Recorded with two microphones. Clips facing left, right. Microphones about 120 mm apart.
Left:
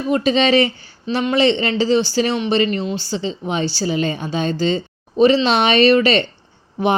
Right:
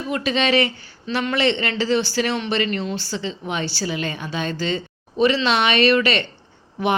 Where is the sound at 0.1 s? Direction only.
30° left (ahead or behind).